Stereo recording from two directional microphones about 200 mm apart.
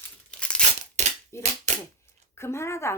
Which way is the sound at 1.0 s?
35° right (ahead or behind).